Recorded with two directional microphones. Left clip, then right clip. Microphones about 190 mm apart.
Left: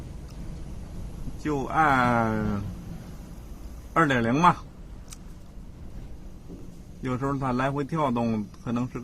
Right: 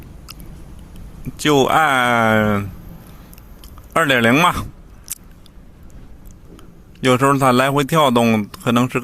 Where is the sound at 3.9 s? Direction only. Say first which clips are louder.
Right 9 dB; 40° right (ahead or behind).